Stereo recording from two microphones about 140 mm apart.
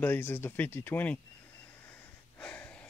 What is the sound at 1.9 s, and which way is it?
Gasp, 10° left (ahead or behind).